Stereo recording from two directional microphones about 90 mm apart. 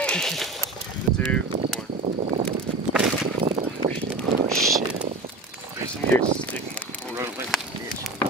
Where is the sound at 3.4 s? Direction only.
80° right.